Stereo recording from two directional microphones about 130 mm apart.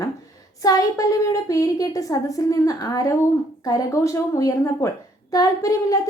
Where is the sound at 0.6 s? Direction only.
30° left (ahead or behind).